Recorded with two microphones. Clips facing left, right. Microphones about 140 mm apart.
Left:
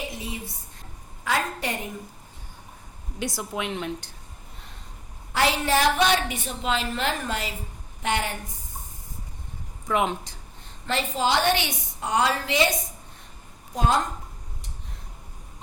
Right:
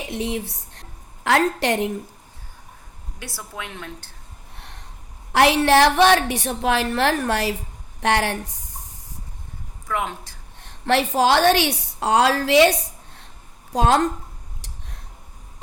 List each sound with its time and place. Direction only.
0.1 s a woman's voice: 75° right (ahead or behind)
3.2 s a woman's voice: 15° left (ahead or behind)
4.5 s a sound: 75° right (ahead or behind)
5.3 s a woman's voice: 75° right (ahead or behind)
9.8 s a woman's voice: 20° left (ahead or behind)
10.6 s a woman's voice: 75° right (ahead or behind)
14.6 s a sound: 80° right